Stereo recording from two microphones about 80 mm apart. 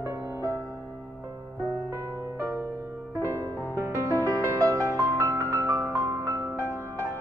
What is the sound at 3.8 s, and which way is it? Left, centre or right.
Music, right.